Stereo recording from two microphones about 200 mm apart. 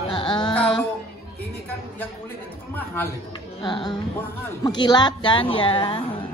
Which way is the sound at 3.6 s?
20° left (ahead or behind).